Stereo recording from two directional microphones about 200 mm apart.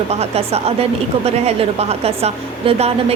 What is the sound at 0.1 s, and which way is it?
A woman's voice, 30° right (ahead or behind).